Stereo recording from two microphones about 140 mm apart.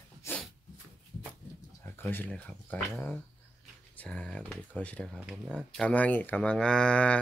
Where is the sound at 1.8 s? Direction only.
15° left (ahead or behind).